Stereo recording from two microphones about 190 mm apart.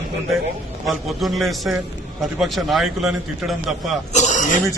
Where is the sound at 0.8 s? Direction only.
Centre (ahead or behind).